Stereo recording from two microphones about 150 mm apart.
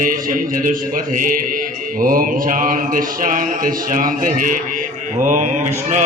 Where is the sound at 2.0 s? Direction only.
70° right (ahead or behind).